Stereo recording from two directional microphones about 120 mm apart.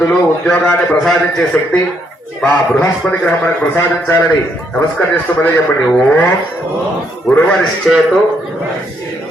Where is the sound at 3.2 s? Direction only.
10° left (ahead or behind).